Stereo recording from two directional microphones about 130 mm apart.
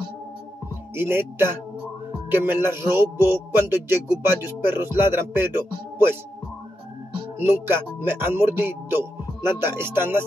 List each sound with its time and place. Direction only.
0.9 s speech: 15° right (ahead or behind)
7.3 s speech: 15° right (ahead or behind)